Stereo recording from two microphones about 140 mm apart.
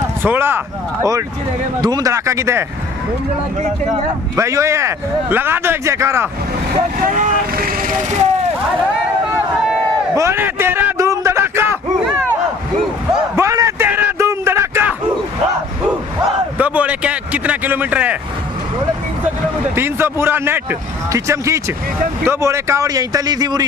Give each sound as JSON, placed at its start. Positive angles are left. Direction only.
{"t": 0.2, "sound": "a man's voice", "side_deg": -15}
{"t": 1.8, "sound": "speech", "side_deg": -30}
{"t": 4.4, "sound": "speech", "side_deg": -20}
{"t": 7.0, "sound": "speech", "side_deg": -65}
{"t": 10.1, "sound": "a sound", "side_deg": -20}
{"t": 13.4, "sound": "a sound", "side_deg": -20}
{"t": 16.5, "sound": "a man's voice", "side_deg": -10}
{"t": 19.2, "sound": "speech", "side_deg": -15}